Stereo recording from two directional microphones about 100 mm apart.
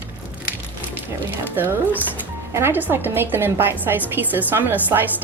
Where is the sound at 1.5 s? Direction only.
20° right (ahead or behind).